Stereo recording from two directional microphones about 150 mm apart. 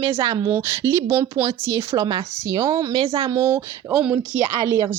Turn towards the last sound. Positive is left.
turn(degrees=-20)  # may be behind; listen again after turning